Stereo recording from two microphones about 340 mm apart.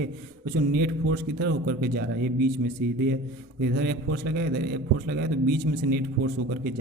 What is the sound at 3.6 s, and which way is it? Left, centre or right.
A man's voice, right.